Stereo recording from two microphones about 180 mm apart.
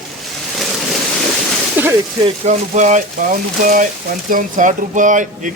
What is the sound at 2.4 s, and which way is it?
Speech, 45° right (ahead or behind).